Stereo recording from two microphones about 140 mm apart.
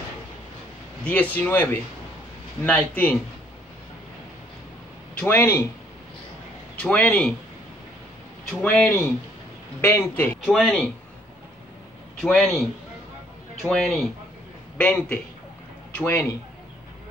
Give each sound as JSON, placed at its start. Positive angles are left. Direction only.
{"t": 1.0, "sound": "speech", "side_deg": 10}
{"t": 5.3, "sound": "speech", "side_deg": 15}
{"t": 6.8, "sound": "speech", "side_deg": 10}
{"t": 8.6, "sound": "speech", "side_deg": 5}
{"t": 9.8, "sound": "speech", "side_deg": 15}
{"t": 10.4, "sound": "speech", "side_deg": 0}
{"t": 12.2, "sound": "a man's voice", "side_deg": 5}